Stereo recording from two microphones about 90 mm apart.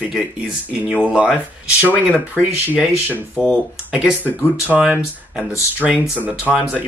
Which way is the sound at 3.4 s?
10° left (ahead or behind).